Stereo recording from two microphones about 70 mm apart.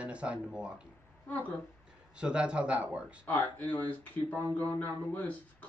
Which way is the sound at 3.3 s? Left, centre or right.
Left.